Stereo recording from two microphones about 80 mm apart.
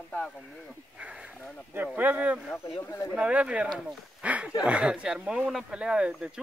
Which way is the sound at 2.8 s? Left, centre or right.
Left.